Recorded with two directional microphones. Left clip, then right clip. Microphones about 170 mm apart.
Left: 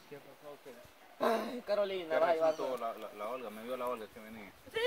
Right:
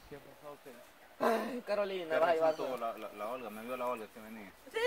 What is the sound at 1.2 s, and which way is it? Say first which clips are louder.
Speech: even; centre (ahead or behind).